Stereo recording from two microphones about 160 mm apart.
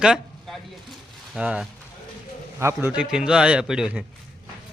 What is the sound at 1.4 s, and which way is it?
Speech, 5° right (ahead or behind).